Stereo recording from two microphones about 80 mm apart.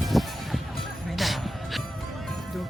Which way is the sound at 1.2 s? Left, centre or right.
Centre.